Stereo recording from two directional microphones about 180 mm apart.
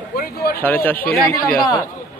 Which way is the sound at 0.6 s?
10° left (ahead or behind).